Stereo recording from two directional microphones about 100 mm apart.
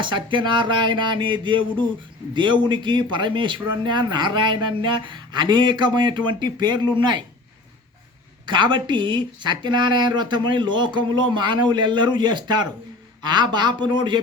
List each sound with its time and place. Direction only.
0.0 s speech: 50° right (ahead or behind)
8.4 s speech: 50° right (ahead or behind)